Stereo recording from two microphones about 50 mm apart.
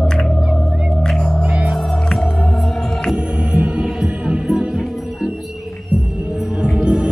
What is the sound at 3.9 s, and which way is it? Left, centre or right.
Music, centre.